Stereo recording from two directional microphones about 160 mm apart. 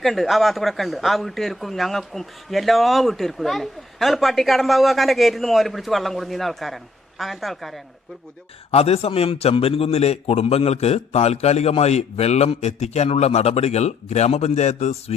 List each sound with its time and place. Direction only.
0.0 s a man's voice: centre (ahead or behind)
8.7 s a man's voice: 40° left (ahead or behind)